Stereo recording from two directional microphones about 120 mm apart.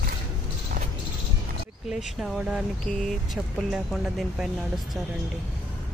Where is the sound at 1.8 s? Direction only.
5° right (ahead or behind).